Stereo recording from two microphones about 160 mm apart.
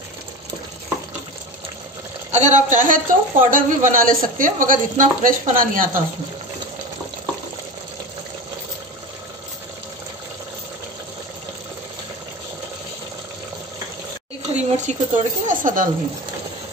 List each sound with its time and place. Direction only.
2.3 s a woman's voice: 50° right (ahead or behind)
14.5 s speech: 50° right (ahead or behind)